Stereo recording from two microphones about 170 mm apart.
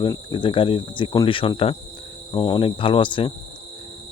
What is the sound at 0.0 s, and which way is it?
Speech, 25° left (ahead or behind).